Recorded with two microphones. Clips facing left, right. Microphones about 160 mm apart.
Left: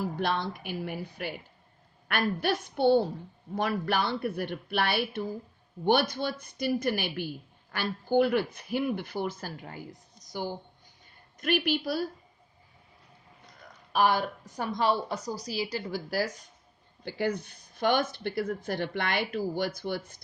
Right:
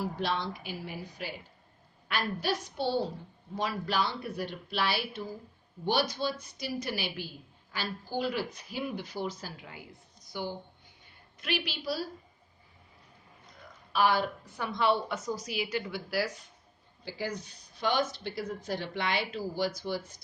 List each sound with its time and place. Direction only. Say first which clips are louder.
0.2 s a woman's voice: left 3 dB; 55° left (ahead or behind)
13.9 s a woman's voice: left 1 dB; 45° left (ahead or behind)
17.0 s speech: left 6 dB; 60° left (ahead or behind)